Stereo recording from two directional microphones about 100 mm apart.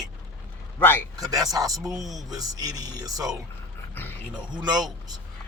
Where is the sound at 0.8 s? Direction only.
20° left (ahead or behind).